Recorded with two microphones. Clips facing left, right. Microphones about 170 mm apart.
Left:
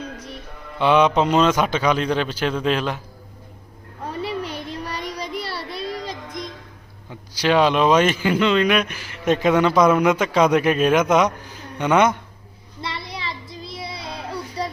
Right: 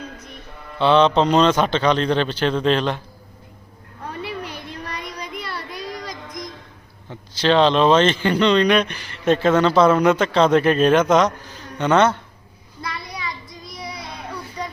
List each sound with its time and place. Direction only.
0.8 s a man's voice: 10° left (ahead or behind)
4.2 s a sound: 30° left (ahead or behind)
5.2 s child singing: 30° left (ahead or behind)
7.1 s a man's voice: 10° left (ahead or behind)
12.8 s child singing: 25° left (ahead or behind)